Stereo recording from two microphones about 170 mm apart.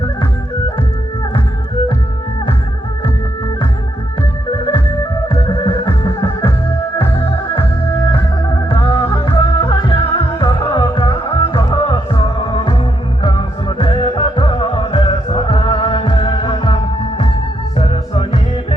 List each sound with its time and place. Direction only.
4.4 s organ: 30° left (ahead or behind)
5.3 s music: 30° left (ahead or behind)
8.1 s music: 25° left (ahead or behind)
13.2 s music: 30° left (ahead or behind)